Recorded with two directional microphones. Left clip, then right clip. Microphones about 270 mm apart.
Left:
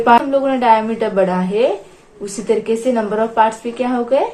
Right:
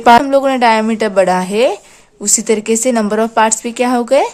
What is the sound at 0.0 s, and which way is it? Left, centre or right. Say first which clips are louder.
A woman's voice: right 4 dB; right.